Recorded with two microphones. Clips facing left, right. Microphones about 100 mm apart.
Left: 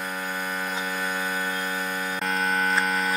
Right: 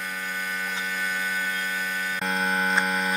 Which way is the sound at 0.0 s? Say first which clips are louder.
Left 2 dB; 45° left (ahead or behind).